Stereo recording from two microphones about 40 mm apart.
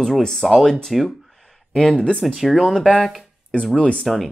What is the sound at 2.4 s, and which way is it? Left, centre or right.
Speech, centre.